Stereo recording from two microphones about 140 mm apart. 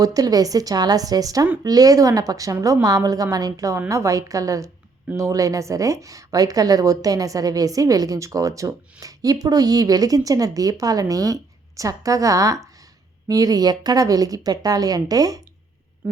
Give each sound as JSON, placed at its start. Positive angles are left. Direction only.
{"t": 0.0, "sound": "a woman's voice", "side_deg": -25}